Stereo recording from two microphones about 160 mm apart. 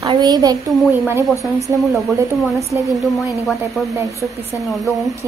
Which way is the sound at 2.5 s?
Centre (ahead or behind).